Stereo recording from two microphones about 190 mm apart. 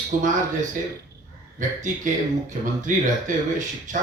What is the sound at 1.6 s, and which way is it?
A man's voice, 40° right (ahead or behind).